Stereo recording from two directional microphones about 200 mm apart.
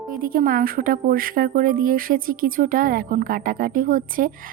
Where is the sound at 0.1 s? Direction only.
45° right (ahead or behind).